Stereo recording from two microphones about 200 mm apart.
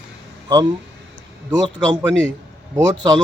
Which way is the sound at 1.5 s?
20° right (ahead or behind).